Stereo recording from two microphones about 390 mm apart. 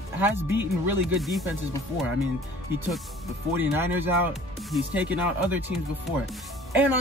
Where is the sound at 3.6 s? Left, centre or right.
Centre.